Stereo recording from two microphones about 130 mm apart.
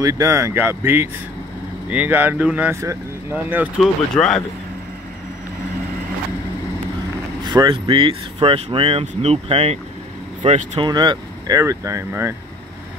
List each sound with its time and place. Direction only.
0.0 s speech: 25° right (ahead or behind)
3.4 s speech: 10° right (ahead or behind)
3.8 s speech: 5° left (ahead or behind)
7.4 s speech: 35° right (ahead or behind); by 10.8 s 60° right (ahead or behind)
10.8 s speech: 35° right (ahead or behind)